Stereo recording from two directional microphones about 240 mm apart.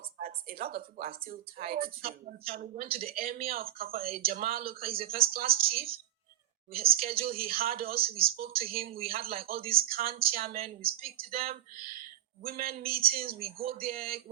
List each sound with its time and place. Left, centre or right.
0.2 s a woman's voice: right